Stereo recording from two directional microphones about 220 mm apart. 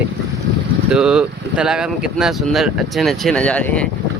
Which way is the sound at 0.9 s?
5° right (ahead or behind).